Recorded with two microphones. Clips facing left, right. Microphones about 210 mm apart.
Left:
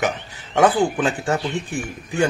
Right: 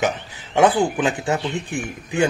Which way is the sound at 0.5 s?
15° right (ahead or behind).